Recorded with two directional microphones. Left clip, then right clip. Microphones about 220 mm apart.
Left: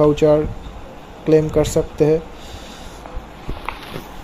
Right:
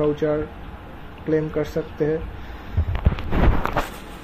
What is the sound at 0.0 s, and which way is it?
Speech, 25° left (ahead or behind).